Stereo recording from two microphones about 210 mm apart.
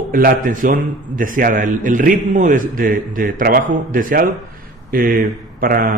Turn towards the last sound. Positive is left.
turn(degrees=-45)  # may be behind; listen again after turning